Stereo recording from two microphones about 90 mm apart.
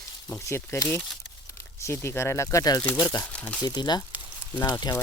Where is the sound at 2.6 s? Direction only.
45° left (ahead or behind).